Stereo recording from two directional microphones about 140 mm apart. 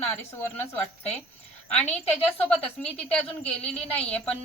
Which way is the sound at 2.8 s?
5° left (ahead or behind).